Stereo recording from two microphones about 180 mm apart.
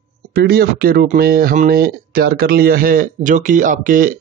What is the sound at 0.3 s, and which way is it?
A man's voice, 65° right (ahead or behind).